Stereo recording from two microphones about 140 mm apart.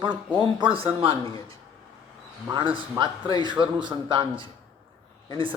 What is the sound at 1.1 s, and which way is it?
Speech, 25° left (ahead or behind).